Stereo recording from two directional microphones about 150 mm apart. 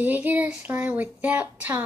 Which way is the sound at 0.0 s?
10° right (ahead or behind).